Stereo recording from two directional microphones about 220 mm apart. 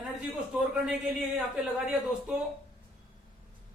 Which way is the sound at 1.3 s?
5° right (ahead or behind).